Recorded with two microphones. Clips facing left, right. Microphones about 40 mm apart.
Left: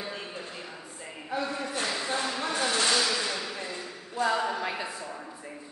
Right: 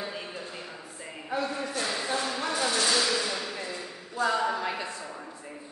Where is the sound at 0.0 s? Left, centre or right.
Centre.